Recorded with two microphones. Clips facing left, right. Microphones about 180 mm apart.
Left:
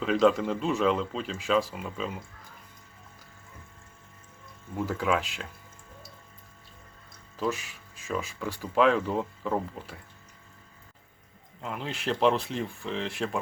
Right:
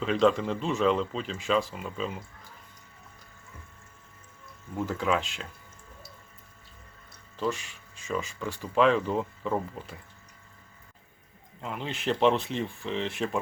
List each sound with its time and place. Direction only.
0.0 s speech: 5° left (ahead or behind)
4.8 s speech: 5° left (ahead or behind)
7.3 s speech: 5° left (ahead or behind)
11.6 s speech: centre (ahead or behind)